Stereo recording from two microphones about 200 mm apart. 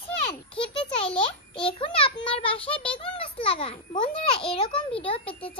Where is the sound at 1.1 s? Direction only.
25° left (ahead or behind).